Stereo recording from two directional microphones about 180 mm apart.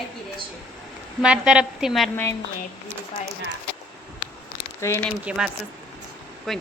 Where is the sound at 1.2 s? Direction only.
5° right (ahead or behind).